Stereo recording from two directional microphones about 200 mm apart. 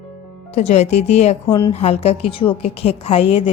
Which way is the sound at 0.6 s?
35° left (ahead or behind).